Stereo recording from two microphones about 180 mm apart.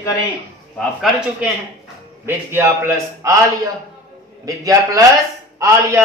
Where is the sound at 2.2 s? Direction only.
15° right (ahead or behind).